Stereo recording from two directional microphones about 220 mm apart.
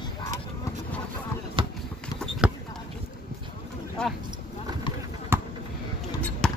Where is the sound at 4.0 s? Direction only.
5° left (ahead or behind).